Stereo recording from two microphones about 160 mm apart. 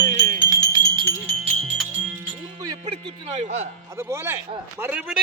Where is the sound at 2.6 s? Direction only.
30° right (ahead or behind).